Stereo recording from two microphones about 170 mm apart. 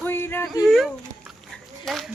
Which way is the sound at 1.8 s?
Centre (ahead or behind).